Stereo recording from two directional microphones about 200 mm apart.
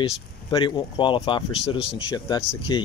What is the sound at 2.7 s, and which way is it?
Speech, 20° left (ahead or behind).